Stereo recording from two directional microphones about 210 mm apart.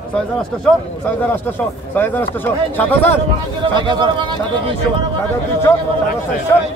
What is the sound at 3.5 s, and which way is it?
Speech, 20° right (ahead or behind).